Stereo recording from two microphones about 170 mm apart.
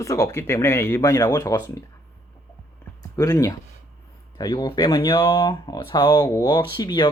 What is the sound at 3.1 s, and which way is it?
Speech, 20° left (ahead or behind).